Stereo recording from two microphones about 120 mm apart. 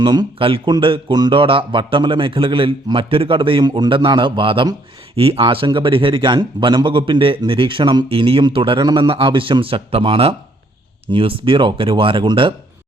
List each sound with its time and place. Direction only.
0.0 s speech: 40° right (ahead or behind)
0.4 s a man's voice: 50° right (ahead or behind)